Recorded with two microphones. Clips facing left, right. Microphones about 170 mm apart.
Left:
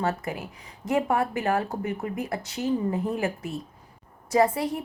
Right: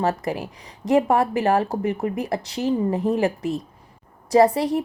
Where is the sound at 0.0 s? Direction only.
35° right (ahead or behind).